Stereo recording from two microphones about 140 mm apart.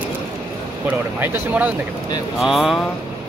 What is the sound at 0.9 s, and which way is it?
Speech, 15° right (ahead or behind).